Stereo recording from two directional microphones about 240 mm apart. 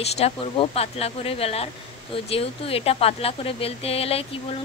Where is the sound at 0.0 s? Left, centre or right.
Left.